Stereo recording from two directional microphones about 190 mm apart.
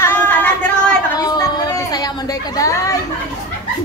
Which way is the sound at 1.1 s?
20° left (ahead or behind).